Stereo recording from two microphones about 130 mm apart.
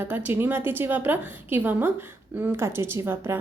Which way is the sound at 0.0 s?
15° right (ahead or behind).